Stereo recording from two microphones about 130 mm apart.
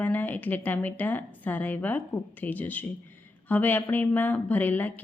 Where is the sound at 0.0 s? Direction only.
15° left (ahead or behind).